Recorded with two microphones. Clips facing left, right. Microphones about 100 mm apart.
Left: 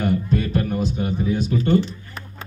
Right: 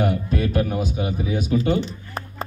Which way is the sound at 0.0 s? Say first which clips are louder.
Left 1 dB; 5° right (ahead or behind).